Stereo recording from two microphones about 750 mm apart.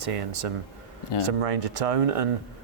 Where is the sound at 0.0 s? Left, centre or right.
Right.